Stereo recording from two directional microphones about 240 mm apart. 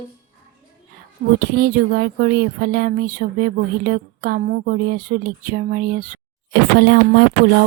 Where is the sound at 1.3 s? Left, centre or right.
Right.